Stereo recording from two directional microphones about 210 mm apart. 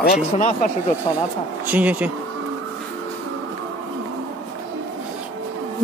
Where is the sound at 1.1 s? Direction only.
20° left (ahead or behind).